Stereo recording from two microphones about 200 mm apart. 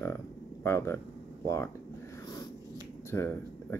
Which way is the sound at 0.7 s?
15° left (ahead or behind).